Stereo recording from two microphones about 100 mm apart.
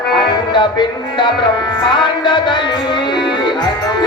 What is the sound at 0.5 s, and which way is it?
Speech, 50° left (ahead or behind).